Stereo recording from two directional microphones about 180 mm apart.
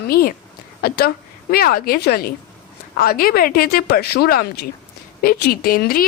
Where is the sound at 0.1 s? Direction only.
55° left (ahead or behind).